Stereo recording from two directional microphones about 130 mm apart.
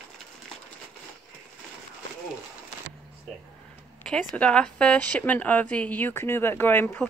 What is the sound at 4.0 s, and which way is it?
Speech, 5° left (ahead or behind).